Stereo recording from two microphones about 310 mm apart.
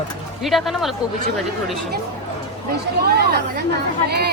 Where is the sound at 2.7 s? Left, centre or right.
Right.